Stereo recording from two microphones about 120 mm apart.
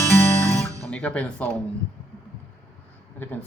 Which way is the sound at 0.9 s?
10° left (ahead or behind).